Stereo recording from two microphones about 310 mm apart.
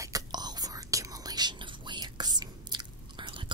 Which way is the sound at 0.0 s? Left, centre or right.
Centre.